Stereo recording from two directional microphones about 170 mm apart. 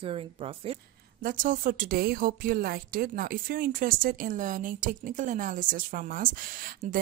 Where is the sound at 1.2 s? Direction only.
55° right (ahead or behind).